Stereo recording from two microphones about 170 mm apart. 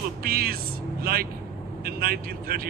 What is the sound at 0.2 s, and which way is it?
Speech, 60° right (ahead or behind).